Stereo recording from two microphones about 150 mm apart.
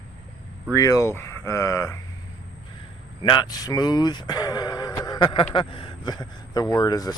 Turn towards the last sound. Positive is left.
turn(degrees=25)  # may be behind; listen again after turning